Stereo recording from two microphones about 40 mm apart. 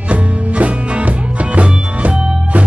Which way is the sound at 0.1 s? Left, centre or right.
Right.